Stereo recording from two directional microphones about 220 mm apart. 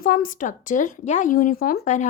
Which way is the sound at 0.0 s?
40° left (ahead or behind).